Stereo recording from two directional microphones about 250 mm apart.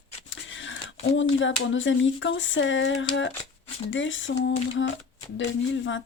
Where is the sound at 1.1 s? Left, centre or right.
Left.